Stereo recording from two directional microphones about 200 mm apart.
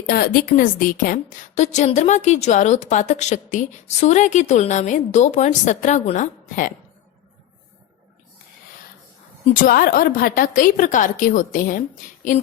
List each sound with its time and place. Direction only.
0.1 s a woman's voice: 50° left (ahead or behind)
9.6 s a woman's voice: 45° left (ahead or behind)